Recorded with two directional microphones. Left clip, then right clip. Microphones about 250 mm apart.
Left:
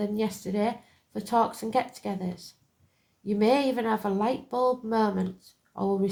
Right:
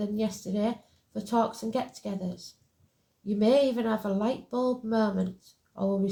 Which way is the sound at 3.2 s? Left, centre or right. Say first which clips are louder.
Even; left.